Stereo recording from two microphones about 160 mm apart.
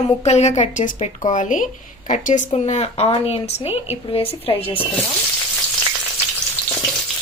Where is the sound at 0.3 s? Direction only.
45° left (ahead or behind).